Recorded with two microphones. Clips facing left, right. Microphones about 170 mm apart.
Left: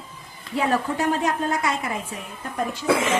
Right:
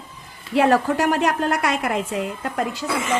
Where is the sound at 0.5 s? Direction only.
75° right (ahead or behind).